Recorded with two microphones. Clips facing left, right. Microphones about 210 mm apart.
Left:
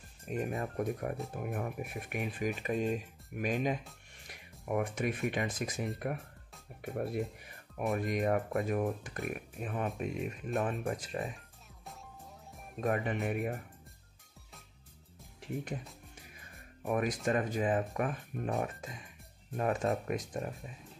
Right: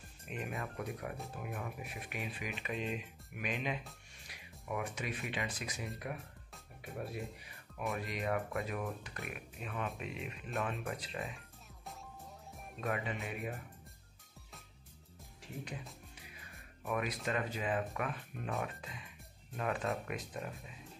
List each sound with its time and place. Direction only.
0.3 s speech: 40° left (ahead or behind)
4.3 s music: 50° left (ahead or behind)
5.3 s speech: 50° left (ahead or behind)
12.8 s speech: 50° left (ahead or behind)
16.2 s speech: 45° left (ahead or behind)